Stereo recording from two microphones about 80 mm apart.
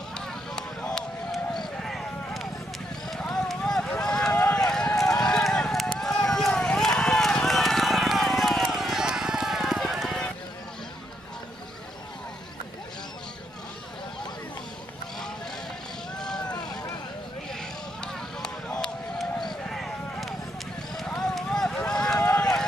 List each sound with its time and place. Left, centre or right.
0.3 s a sound: centre
4.0 s run: centre
4.3 s run: left
4.6 s run: centre
16.4 s vehicle: left
18.0 s a sound: centre
21.2 s run: centre